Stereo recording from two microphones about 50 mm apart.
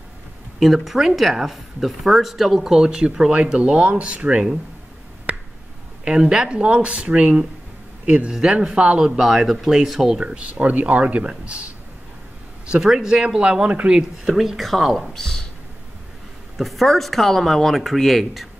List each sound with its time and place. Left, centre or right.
0.6 s speech: centre; by 4.5 s right
5.3 s finger snapping: right
6.0 s speech: centre
9.2 s speech: centre
10.5 s speech: right
13.9 s speech: centre
16.5 s speech: centre